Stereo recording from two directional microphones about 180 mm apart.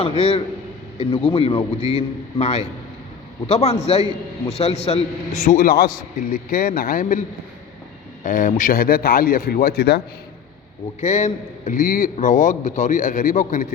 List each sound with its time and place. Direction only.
0.0 s a man's voice: 30° left (ahead or behind)
8.2 s a man's voice: 45° left (ahead or behind); by 10.0 s 65° left (ahead or behind)
11.0 s a man's voice: 40° left (ahead or behind)